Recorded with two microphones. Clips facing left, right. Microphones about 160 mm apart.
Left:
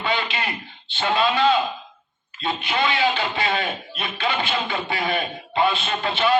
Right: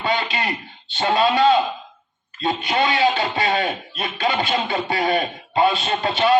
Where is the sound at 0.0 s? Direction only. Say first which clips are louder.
Right 2 dB; 35° right (ahead or behind).